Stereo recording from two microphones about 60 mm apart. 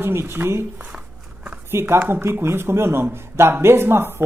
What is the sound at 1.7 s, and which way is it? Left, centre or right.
Speech, right.